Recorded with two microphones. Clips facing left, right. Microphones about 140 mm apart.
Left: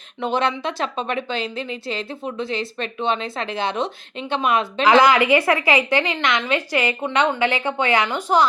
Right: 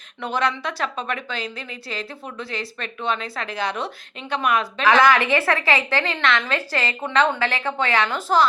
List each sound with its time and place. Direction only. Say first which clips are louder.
0.2 s a woman's voice: left 2 dB; 25° left (ahead or behind)